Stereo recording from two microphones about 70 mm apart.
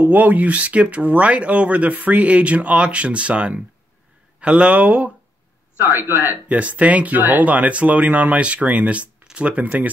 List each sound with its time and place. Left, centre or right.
0.0 s speech: right
6.0 s speech: left
6.3 s speech: centre